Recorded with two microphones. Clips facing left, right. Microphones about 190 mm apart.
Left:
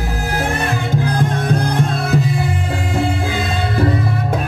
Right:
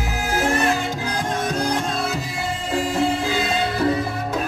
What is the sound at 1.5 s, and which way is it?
Music, 55° left (ahead or behind).